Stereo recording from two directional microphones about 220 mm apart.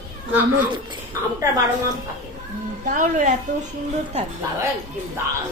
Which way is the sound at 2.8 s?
35° right (ahead or behind).